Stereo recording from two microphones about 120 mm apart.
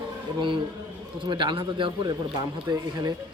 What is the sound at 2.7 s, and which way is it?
Speech, 30° right (ahead or behind).